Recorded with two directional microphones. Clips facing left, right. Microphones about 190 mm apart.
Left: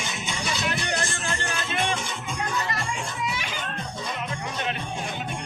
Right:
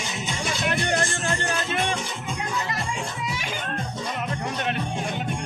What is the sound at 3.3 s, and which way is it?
Music, 45° right (ahead or behind).